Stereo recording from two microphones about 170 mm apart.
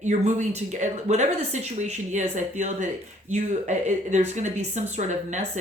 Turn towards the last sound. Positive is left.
turn(degrees=-45)  # may be behind; listen again after turning